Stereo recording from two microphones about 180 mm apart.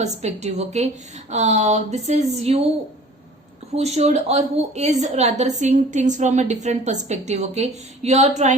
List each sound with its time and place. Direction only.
0.0 s a woman's voice: 40° right (ahead or behind)
3.8 s a woman's voice: 35° right (ahead or behind)